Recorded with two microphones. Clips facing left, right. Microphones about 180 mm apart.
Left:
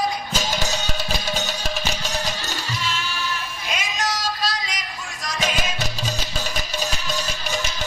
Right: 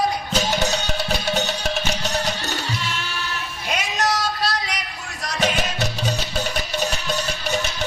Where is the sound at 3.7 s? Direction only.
65° right (ahead or behind).